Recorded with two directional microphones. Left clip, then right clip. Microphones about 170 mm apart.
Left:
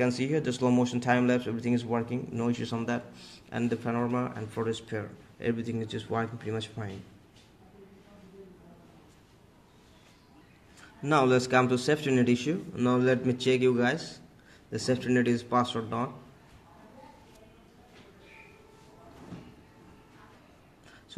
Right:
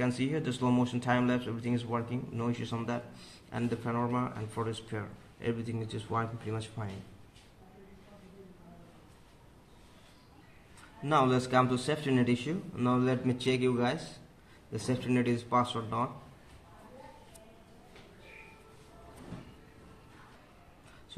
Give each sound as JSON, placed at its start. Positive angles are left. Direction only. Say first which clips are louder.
{"t": 0.0, "sound": "a man's voice", "louder": "left 5 dB", "side_deg": 30}
{"t": 11.1, "sound": "a man's voice", "louder": "left 3 dB", "side_deg": 30}